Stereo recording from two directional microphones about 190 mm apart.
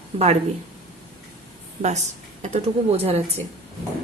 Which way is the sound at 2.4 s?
35° right (ahead or behind).